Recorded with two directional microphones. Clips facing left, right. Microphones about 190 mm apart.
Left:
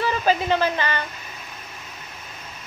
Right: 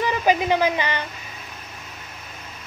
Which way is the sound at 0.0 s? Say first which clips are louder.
Right 1 dB; 15° right (ahead or behind).